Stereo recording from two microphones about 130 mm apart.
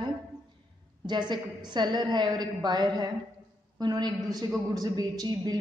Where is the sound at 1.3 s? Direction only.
35° right (ahead or behind).